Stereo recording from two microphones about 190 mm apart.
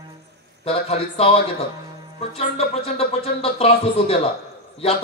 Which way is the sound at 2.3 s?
30° left (ahead or behind).